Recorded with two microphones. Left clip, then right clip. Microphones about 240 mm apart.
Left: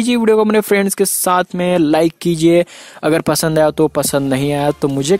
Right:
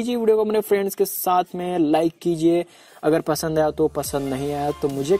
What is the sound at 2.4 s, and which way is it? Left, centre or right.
Speech, left.